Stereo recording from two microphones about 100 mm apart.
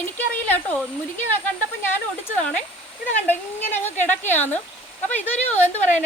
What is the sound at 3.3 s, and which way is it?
Speech, 20° left (ahead or behind).